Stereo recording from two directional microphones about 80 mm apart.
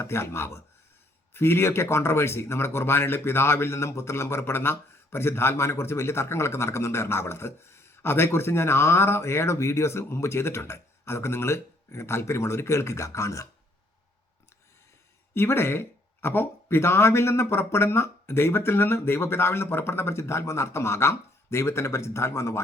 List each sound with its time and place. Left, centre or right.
0.0 s speech: left
15.4 s speech: left